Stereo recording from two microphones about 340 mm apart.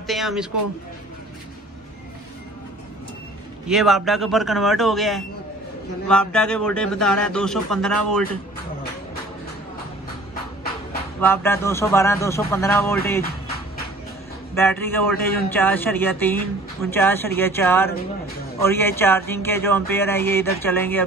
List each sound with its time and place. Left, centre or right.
0.0 s a sound: centre
3.6 s a man's voice: centre
11.1 s speech: centre
14.5 s speech: centre
15.1 s a man's voice: left
15.5 s a man's voice: centre